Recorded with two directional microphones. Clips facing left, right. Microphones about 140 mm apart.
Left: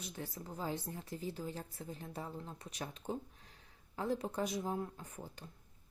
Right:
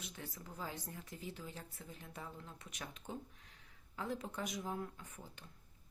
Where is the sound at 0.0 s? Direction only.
35° left (ahead or behind).